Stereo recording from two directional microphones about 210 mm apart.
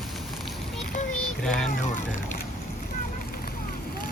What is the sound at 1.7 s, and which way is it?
Speech, 35° left (ahead or behind).